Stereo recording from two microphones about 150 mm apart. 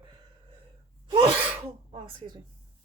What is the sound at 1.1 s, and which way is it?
Sneeze, 35° right (ahead or behind).